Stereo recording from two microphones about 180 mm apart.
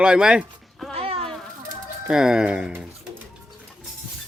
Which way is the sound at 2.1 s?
5° right (ahead or behind).